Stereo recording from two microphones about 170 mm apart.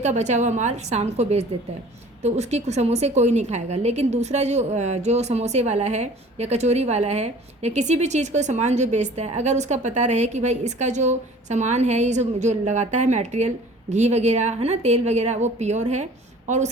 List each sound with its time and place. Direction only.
0.0 s a woman's voice: 45° right (ahead or behind)